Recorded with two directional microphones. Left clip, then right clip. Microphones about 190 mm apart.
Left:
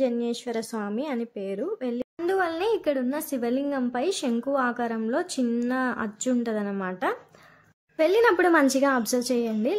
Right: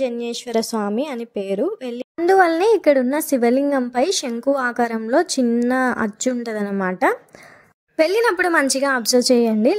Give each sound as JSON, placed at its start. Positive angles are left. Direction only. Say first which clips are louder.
{"t": 0.0, "sound": "a woman's voice", "louder": "right 3 dB", "side_deg": -35}